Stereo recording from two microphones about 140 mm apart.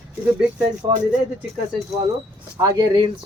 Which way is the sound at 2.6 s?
30° right (ahead or behind).